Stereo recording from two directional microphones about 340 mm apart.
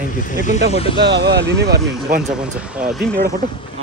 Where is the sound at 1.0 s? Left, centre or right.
Right.